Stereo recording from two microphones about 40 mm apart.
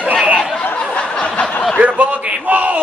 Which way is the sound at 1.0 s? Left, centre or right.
Left.